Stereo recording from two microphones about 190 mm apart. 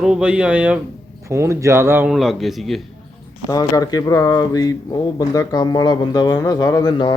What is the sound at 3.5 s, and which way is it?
Speech, 20° left (ahead or behind).